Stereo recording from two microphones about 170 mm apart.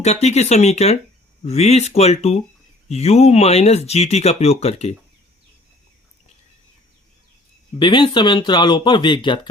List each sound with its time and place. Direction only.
0.0 s speech: 40° left (ahead or behind)
7.8 s speech: 25° left (ahead or behind)